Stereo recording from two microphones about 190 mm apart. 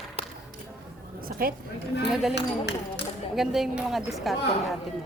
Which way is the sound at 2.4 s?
65° left (ahead or behind).